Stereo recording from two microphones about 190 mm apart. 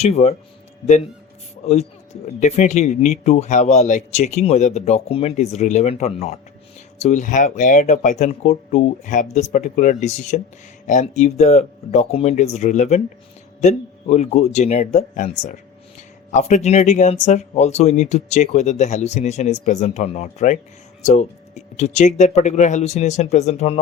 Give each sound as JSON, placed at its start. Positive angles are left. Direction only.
{"t": 0.0, "sound": "speech", "side_deg": 35}
{"t": 1.6, "sound": "speech", "side_deg": 35}
{"t": 16.3, "sound": "speech", "side_deg": 40}